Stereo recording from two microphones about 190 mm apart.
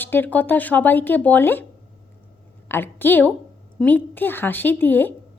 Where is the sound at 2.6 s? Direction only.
10° left (ahead or behind).